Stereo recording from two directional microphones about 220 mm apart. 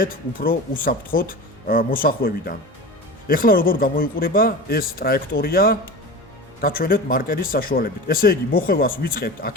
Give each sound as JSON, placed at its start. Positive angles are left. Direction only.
{"t": 0.0, "sound": "speech", "side_deg": 40}